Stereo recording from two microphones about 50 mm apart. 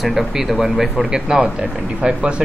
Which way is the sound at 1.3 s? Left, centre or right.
Right.